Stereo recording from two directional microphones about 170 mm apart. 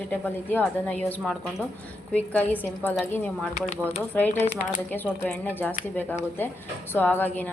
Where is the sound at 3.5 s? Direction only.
45° left (ahead or behind).